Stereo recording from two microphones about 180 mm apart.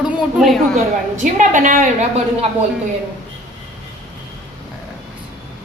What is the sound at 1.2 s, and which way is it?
A woman's voice, 45° right (ahead or behind).